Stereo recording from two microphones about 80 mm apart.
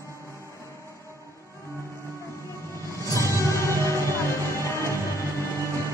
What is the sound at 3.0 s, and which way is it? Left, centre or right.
Music, left.